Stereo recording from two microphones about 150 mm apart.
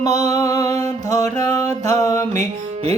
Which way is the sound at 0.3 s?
25° left (ahead or behind).